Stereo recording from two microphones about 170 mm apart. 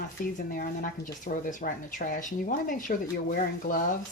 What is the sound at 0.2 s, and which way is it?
Speech, 50° left (ahead or behind).